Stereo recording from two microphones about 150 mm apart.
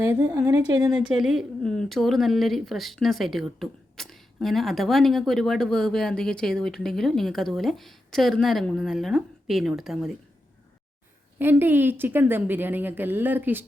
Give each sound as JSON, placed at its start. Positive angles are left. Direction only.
{"t": 0.1, "sound": "a woman's voice", "side_deg": -25}
{"t": 0.9, "sound": "speech", "side_deg": -5}
{"t": 11.3, "sound": "a woman's voice", "side_deg": -15}